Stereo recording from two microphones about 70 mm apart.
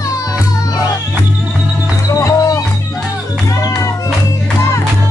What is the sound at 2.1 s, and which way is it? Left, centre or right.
Music, left.